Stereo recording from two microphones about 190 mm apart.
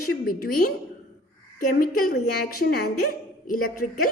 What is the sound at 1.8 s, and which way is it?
A woman's voice, 50° left (ahead or behind).